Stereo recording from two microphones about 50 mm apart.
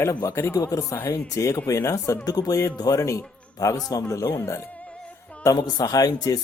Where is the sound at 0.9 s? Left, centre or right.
Left.